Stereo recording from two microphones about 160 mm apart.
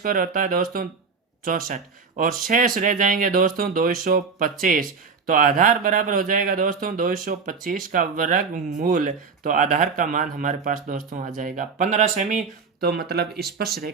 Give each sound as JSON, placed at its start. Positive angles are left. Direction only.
{"t": 0.0, "sound": "speech", "side_deg": -60}
{"t": 12.8, "sound": "speech", "side_deg": -80}